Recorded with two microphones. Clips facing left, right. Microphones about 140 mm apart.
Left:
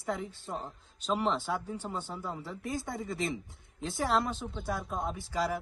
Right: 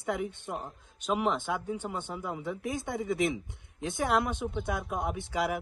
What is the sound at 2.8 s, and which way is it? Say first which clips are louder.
Speech: right 5 dB; centre (ahead or behind).